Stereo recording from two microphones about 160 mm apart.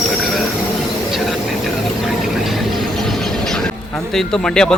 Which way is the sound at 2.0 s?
Centre (ahead or behind).